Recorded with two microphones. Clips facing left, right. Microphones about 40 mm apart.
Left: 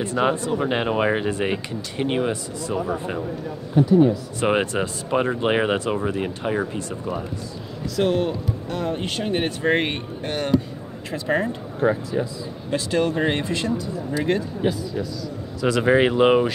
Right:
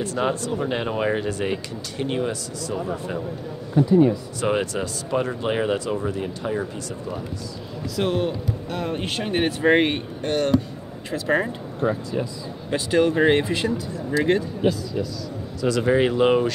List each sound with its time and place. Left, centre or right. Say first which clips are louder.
0.0 s speech: left 2 dB; centre
4.4 s speech: left 4 dB; left
7.9 s speech: left 2 dB; centre
12.7 s speech: right 2 dB; centre
15.6 s speech: left 2 dB; left